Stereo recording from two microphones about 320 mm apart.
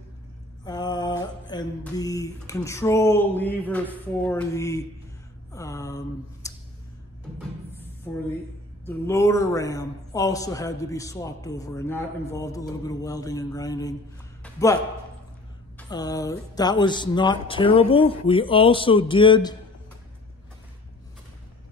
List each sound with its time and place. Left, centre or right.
0.7 s a sound: centre
3.8 s a man's voice: centre
5.5 s mantra: centre
7.3 s music: centre
8.8 s a man's voice: centre
14.4 s a sound: centre
15.8 s a man's voice: centre